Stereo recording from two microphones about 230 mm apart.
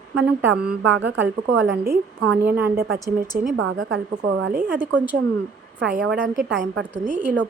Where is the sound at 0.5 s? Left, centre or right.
Right.